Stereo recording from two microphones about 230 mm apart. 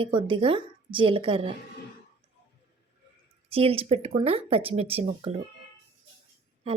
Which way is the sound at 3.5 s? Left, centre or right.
Right.